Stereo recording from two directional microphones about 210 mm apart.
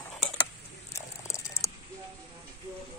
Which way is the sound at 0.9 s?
15° left (ahead or behind).